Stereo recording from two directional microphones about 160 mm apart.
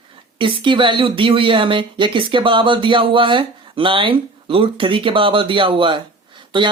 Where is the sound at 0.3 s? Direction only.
30° right (ahead or behind).